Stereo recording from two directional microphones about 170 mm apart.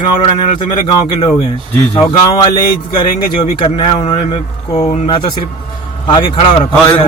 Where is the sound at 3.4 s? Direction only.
30° left (ahead or behind).